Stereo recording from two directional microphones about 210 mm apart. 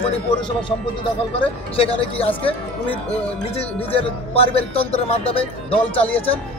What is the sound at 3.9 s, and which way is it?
Speech, 25° left (ahead or behind).